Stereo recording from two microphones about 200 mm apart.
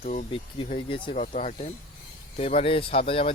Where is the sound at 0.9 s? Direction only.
25° left (ahead or behind).